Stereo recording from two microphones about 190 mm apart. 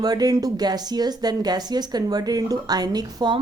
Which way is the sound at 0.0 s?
20° right (ahead or behind).